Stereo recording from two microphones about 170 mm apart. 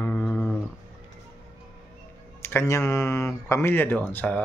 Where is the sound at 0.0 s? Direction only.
10° left (ahead or behind).